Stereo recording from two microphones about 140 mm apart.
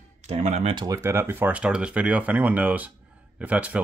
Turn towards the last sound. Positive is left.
turn(degrees=-10)  # may be behind; listen again after turning